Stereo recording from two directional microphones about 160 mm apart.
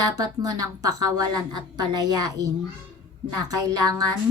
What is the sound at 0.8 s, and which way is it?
A woman's voice, 25° right (ahead or behind).